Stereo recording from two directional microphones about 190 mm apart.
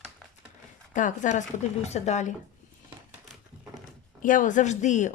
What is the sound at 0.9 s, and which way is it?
Speech, 40° left (ahead or behind).